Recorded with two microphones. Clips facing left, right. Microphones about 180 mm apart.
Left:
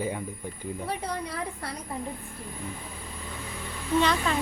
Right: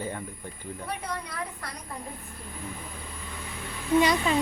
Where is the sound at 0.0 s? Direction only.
10° left (ahead or behind).